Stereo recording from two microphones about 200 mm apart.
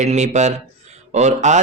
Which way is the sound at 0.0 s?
35° right (ahead or behind).